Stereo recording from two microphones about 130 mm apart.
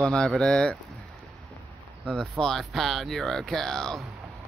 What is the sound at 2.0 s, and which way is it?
Speech, 5° left (ahead or behind).